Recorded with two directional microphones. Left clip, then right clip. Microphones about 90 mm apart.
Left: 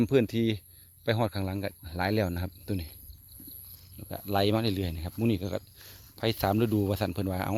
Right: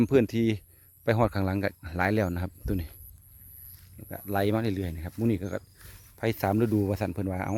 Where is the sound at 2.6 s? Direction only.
30° right (ahead or behind).